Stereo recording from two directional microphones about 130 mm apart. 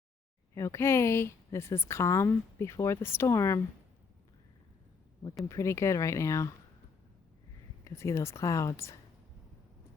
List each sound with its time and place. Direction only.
0.5 s a woman's voice: 20° left (ahead or behind)
5.5 s a woman's voice: 20° left (ahead or behind)
7.9 s a woman's voice: 20° left (ahead or behind)